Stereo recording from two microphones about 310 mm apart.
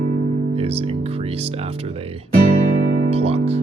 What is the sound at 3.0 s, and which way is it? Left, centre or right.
Speech, centre.